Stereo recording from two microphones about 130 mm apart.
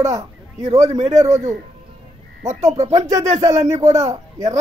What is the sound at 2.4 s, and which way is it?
Speech, 60° right (ahead or behind).